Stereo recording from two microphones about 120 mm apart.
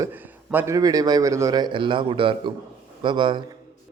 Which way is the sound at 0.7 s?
30° right (ahead or behind).